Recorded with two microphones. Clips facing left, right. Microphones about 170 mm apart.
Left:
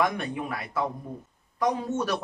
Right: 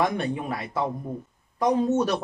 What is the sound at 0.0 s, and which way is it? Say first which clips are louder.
Speech: right 2 dB; 30° right (ahead or behind).